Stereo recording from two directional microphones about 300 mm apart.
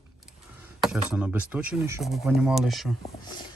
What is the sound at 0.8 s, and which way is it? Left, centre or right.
Speech, centre.